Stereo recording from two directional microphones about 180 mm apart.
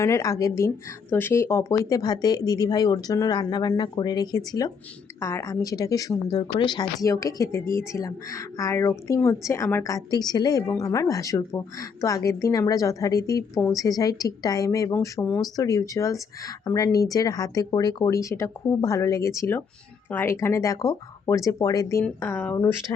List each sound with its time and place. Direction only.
0.0 s a woman's voice: 15° left (ahead or behind)